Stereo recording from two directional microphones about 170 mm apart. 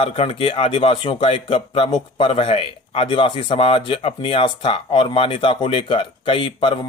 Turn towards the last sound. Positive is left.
turn(degrees=30)  # may be behind; listen again after turning